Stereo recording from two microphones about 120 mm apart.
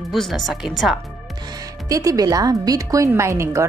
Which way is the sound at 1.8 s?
30° right (ahead or behind).